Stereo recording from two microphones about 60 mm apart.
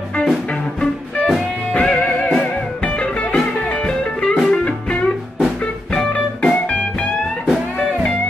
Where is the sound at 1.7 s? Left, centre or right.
Centre.